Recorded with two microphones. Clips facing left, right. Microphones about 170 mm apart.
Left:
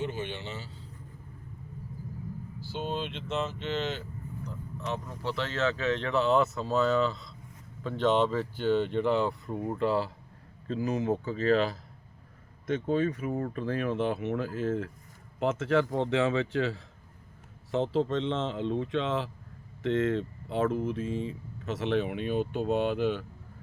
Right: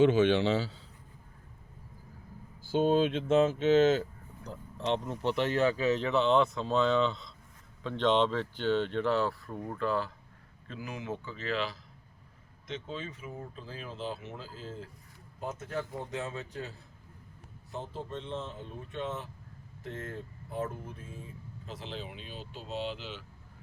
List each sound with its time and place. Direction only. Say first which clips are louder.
0.0 s a man's voice: right 12 dB; 90° right
2.6 s speech: right 9 dB; 50° right (ahead or behind)
4.4 s speech: right 4 dB; 30° right (ahead or behind); by 14.8 s 70° left (ahead or behind)
15.4 s speech: left 10 dB; 90° left; by 23.2 s 55° left (ahead or behind)